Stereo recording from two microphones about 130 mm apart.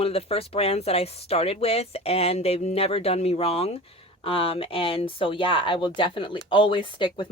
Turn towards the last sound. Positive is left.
turn(degrees=40)  # may be behind; listen again after turning